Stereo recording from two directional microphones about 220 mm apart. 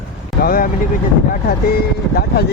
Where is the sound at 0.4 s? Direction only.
40° left (ahead or behind).